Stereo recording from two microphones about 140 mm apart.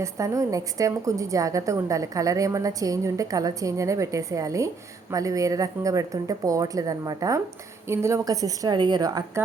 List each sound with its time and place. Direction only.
0.0 s a woman's voice: 20° right (ahead or behind)